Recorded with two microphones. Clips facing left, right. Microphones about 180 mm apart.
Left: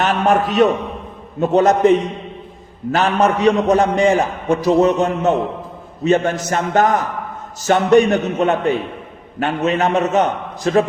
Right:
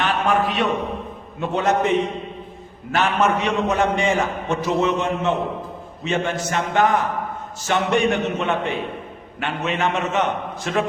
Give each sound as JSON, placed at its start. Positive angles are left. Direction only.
{"t": 0.0, "sound": "a man's voice", "side_deg": 45}